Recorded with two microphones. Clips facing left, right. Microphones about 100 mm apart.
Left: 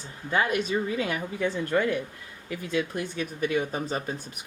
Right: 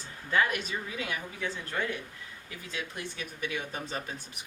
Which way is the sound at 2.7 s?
50° left (ahead or behind).